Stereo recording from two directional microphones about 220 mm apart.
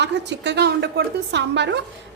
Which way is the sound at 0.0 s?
50° right (ahead or behind).